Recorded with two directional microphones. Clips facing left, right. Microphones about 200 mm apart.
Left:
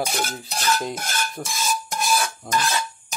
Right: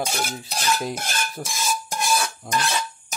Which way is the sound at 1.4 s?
5° right (ahead or behind).